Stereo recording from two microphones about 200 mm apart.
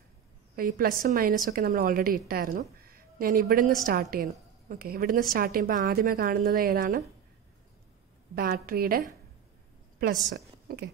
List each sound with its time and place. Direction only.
0.6 s a woman's voice: 45° right (ahead or behind)
8.4 s a woman's voice: 50° right (ahead or behind)
10.3 s a woman's voice: 55° right (ahead or behind)